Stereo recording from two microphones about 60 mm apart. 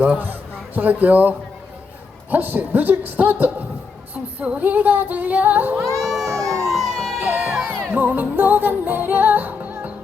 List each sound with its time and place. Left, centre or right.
0.2 s a woman's voice: right
4.1 s female singing: right
5.8 s speech: right
6.2 s a sound: right
6.7 s emergency vehicle: centre
7.2 s music: right